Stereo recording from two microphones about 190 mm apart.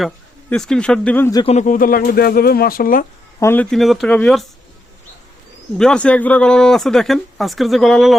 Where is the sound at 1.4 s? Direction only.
40° left (ahead or behind).